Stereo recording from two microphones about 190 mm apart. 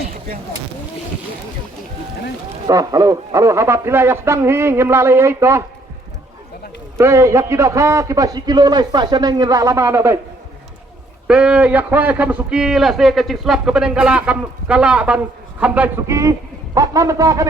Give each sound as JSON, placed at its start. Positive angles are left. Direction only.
{"t": 2.6, "sound": "a man's voice", "side_deg": -20}
{"t": 6.9, "sound": "a man's voice", "side_deg": -15}
{"t": 11.3, "sound": "a man's voice", "side_deg": -5}